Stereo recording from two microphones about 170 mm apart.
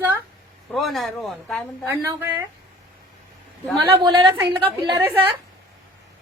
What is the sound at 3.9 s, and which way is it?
A woman's voice, 25° right (ahead or behind).